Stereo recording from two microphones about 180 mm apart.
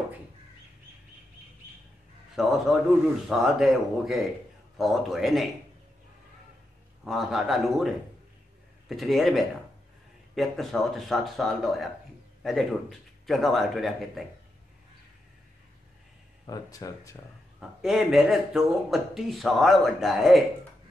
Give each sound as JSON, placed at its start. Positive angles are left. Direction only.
{"t": 2.3, "sound": "speech", "side_deg": 0}
{"t": 7.1, "sound": "speech", "side_deg": 0}
{"t": 13.3, "sound": "speech", "side_deg": 0}
{"t": 16.4, "sound": "speech", "side_deg": 20}
{"t": 17.6, "sound": "speech", "side_deg": 0}